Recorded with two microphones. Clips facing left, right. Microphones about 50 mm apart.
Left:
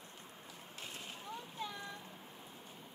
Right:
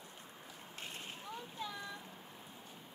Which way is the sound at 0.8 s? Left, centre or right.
Centre.